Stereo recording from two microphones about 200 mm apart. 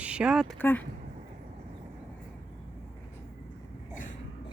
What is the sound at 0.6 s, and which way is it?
Speech, 10° left (ahead or behind).